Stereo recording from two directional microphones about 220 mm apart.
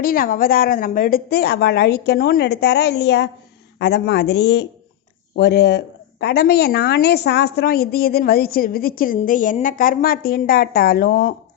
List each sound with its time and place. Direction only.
0.0 s a woman's voice: 40° left (ahead or behind)